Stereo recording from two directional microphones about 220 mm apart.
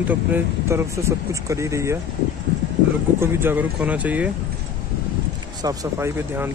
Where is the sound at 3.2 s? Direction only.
10° right (ahead or behind).